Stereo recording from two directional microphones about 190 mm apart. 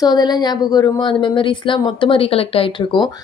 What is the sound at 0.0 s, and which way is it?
Speech, 20° left (ahead or behind).